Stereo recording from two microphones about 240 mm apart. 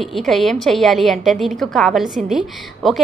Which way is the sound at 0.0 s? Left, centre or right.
Centre.